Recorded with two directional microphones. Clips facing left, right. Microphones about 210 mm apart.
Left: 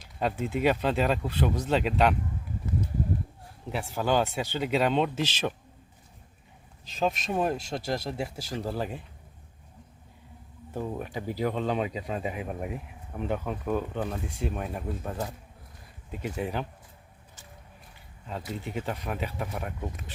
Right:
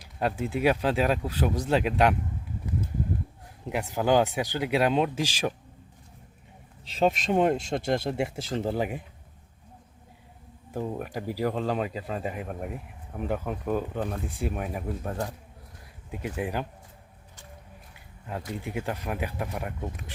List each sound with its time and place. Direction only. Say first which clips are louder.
0.2 s speech: right 1 dB; 10° right (ahead or behind)
3.7 s speech: right 3 dB; 15° right (ahead or behind)
7.0 s speech: right 4 dB; 25° right (ahead or behind)
10.7 s speech: right 1 dB; 10° right (ahead or behind)
16.1 s speech: right 1 dB; 5° right (ahead or behind)
18.6 s speech: right 1 dB; 10° right (ahead or behind)